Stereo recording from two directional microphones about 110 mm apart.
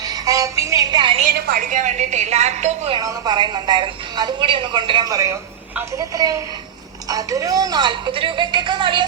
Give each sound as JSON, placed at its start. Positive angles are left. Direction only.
{"t": 0.0, "sound": "music", "side_deg": -35}
{"t": 1.8, "sound": "speech", "side_deg": -90}
{"t": 3.0, "sound": "speech", "side_deg": -30}
{"t": 3.3, "sound": "a woman's voice", "side_deg": -45}
{"t": 5.1, "sound": "a man's voice", "side_deg": -25}